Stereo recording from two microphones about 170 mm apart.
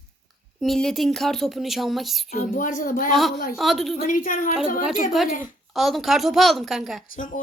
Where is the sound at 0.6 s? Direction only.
Centre (ahead or behind).